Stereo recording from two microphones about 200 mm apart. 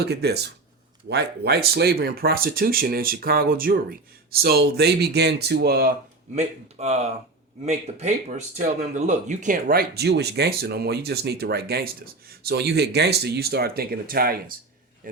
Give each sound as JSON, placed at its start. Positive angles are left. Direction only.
{"t": 0.0, "sound": "speech", "side_deg": -55}
{"t": 6.3, "sound": "a man's voice", "side_deg": -35}